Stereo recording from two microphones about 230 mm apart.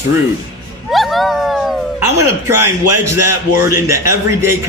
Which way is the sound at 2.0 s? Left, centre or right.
Centre.